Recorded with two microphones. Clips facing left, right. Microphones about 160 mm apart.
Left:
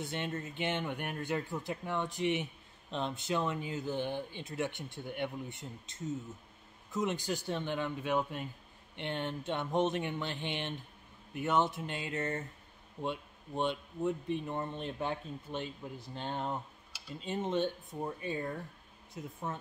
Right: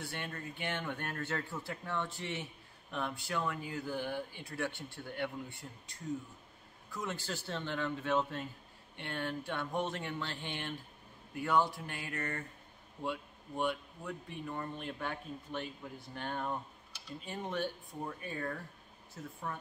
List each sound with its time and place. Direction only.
0.0 s speech: 20° left (ahead or behind)